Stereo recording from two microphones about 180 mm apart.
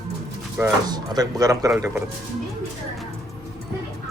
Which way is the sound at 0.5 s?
20° right (ahead or behind).